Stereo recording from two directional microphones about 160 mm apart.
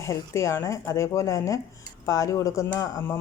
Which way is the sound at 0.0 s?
20° left (ahead or behind).